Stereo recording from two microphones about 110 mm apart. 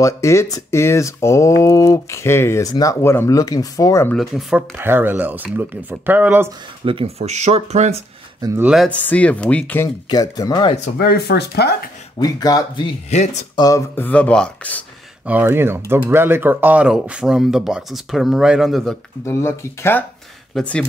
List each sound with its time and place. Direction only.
0.0 s speech: 25° left (ahead or behind)
4.1 s speech: centre (ahead or behind)
4.6 s speech: 20° right (ahead or behind)
6.8 s speech: 55° right (ahead or behind)
7.2 s speech: 90° right
8.4 s speech: 35° right (ahead or behind)
8.8 s speech: 15° left (ahead or behind)
10.0 s speech: 35° left (ahead or behind)
12.2 s speech: 35° left (ahead or behind)
13.1 s speech: 90° left
13.6 s speech: 30° left (ahead or behind)
13.9 s speech: 15° left (ahead or behind)
15.2 s speech: 15° right (ahead or behind); by 18.9 s centre (ahead or behind)
19.2 s speech: 25° left (ahead or behind)